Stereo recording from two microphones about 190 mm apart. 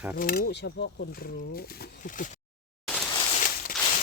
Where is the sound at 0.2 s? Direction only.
50° left (ahead or behind).